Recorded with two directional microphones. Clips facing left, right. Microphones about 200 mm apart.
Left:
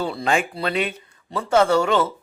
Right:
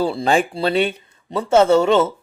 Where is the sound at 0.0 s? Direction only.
30° right (ahead or behind).